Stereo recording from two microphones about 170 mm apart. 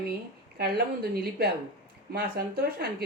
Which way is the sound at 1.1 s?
65° right (ahead or behind).